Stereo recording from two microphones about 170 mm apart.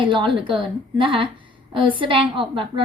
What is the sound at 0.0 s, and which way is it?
A woman's voice, 30° right (ahead or behind).